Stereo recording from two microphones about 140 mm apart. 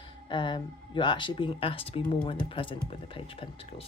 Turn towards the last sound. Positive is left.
turn(degrees=40)  # may be behind; listen again after turning